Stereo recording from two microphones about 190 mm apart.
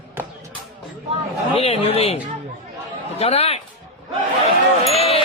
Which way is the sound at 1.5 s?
30° left (ahead or behind).